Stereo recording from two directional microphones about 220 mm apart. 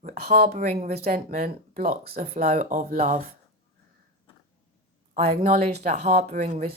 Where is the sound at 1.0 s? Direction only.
45° right (ahead or behind).